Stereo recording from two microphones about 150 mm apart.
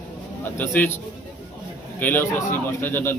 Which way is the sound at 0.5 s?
10° left (ahead or behind).